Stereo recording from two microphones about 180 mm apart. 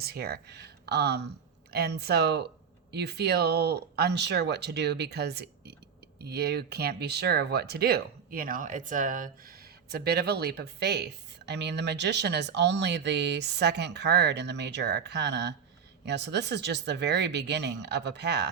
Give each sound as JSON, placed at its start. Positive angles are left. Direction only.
{"t": 0.0, "sound": "speech", "side_deg": -60}